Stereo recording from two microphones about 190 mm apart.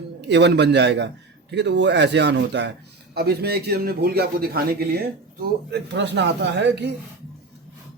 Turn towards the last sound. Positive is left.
turn(degrees=-65)  # may be behind; listen again after turning